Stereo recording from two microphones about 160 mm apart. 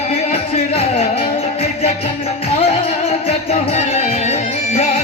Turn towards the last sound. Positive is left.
turn(degrees=40)  # may be behind; listen again after turning